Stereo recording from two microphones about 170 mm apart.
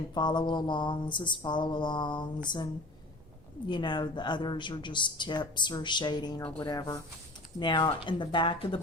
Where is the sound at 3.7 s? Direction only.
30° left (ahead or behind).